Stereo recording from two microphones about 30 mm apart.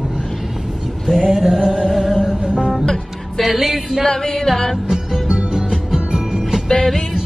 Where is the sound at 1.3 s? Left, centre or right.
Centre.